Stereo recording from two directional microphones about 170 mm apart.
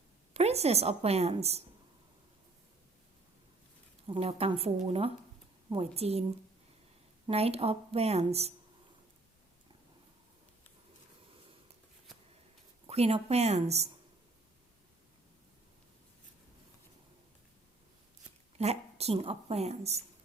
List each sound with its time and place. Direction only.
0.3 s speech: 40° right (ahead or behind)
4.0 s speech: 35° right (ahead or behind)
7.3 s speech: 35° right (ahead or behind)
12.9 s speech: 35° right (ahead or behind)
18.5 s a woman's voice: 35° right (ahead or behind)